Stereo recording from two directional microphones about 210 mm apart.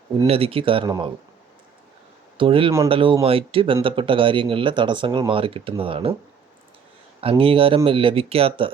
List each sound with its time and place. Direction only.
0.3 s speech: 25° right (ahead or behind)
2.4 s speech: 25° right (ahead or behind)
7.2 s speech: 25° right (ahead or behind)